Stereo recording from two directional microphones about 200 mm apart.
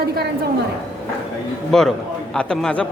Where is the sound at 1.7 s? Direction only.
Centre (ahead or behind).